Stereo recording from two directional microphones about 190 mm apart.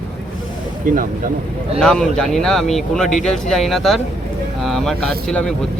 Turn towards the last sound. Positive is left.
turn(degrees=5)  # may be behind; listen again after turning